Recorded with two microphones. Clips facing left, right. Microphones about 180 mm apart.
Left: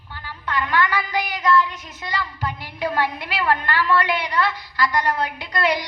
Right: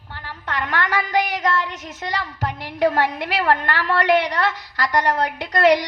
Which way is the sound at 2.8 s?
45° right (ahead or behind).